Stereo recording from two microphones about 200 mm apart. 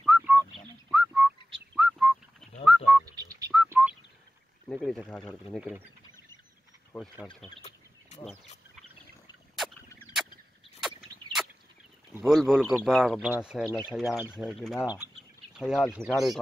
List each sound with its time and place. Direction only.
0.0 s bird: centre (ahead or behind)
0.8 s whistling: centre (ahead or behind)
1.8 s a sound: 5° right (ahead or behind)
3.2 s whistling: 20° right (ahead or behind)
3.6 s bird: 10° right (ahead or behind)
4.6 s speech: centre (ahead or behind)
6.9 s speech: 5° left (ahead or behind)
8.1 s fowl: 35° left (ahead or behind)
12.3 s speech: centre (ahead or behind)